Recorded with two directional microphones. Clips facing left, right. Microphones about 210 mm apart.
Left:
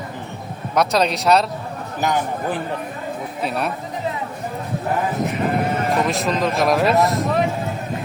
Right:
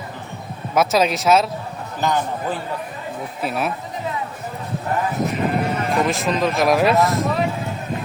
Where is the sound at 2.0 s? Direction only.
15° left (ahead or behind).